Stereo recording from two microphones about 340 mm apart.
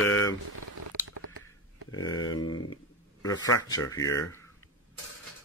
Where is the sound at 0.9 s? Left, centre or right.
Right.